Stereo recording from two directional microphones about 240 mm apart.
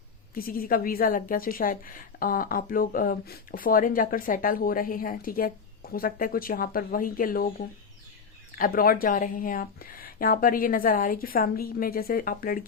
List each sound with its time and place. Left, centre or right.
0.3 s a woman's voice: left
8.5 s a woman's voice: left